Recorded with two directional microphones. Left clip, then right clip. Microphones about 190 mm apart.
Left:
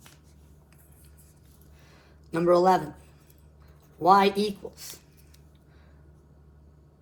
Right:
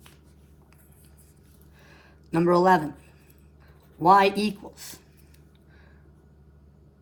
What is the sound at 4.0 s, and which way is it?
Speech, 45° right (ahead or behind).